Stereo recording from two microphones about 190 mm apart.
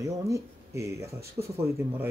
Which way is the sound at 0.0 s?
15° right (ahead or behind).